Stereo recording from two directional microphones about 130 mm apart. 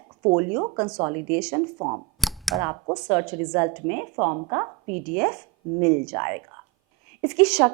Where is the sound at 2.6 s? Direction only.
20° right (ahead or behind).